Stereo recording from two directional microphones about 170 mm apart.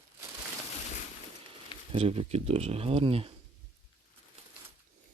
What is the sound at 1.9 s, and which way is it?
Speech, 35° right (ahead or behind).